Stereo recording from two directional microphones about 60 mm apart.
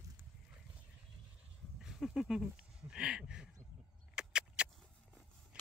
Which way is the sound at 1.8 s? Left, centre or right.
Centre.